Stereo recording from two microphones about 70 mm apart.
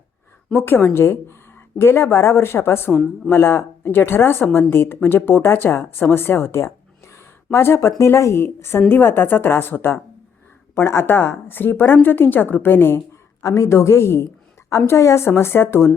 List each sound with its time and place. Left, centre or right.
0.5 s a woman's voice: left
13.4 s speech: left